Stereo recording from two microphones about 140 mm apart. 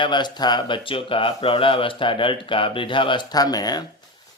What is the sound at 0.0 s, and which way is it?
Speech, 30° left (ahead or behind).